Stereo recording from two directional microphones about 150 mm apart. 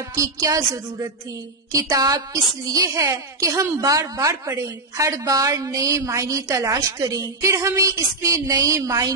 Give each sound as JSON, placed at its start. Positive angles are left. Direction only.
{"t": 0.1, "sound": "a woman's voice", "side_deg": -20}